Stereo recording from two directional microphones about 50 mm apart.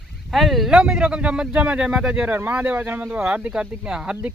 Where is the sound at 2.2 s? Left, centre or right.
Right.